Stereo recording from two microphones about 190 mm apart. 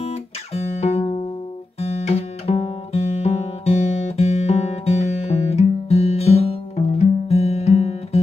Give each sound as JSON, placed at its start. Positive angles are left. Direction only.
{"t": 0.0, "sound": "guitar", "side_deg": 35}
{"t": 1.8, "sound": "music", "side_deg": 35}